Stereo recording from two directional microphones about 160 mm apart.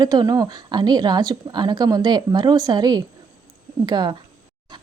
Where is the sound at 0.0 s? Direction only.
25° right (ahead or behind).